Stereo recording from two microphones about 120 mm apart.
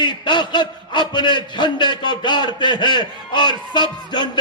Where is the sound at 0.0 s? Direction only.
40° left (ahead or behind).